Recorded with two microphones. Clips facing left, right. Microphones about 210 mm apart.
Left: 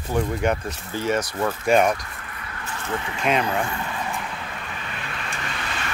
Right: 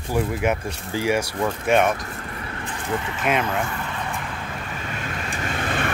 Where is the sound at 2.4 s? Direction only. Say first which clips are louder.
Right 1 dB; 30° right (ahead or behind).